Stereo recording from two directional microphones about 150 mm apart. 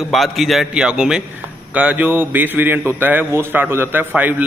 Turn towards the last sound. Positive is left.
turn(degrees=-10)  # may be behind; listen again after turning